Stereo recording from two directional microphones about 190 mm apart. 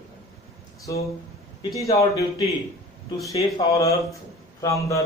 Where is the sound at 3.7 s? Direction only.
15° left (ahead or behind).